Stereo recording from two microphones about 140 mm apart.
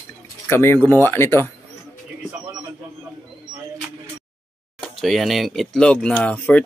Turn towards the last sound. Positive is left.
turn(degrees=10)  # may be behind; listen again after turning